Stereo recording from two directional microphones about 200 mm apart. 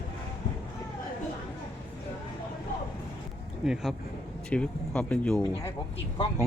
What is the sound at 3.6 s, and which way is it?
Speech, 5° right (ahead or behind).